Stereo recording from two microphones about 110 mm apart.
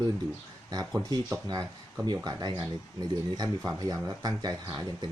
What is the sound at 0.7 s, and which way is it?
Speech, 35° right (ahead or behind).